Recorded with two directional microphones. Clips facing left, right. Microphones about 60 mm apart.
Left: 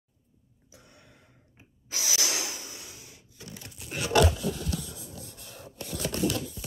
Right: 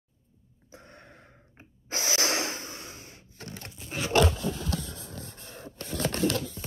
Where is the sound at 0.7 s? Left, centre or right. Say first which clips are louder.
Right 6 dB; right.